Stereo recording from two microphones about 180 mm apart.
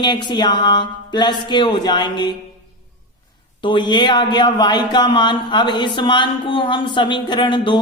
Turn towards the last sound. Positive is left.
turn(degrees=25)  # may be behind; listen again after turning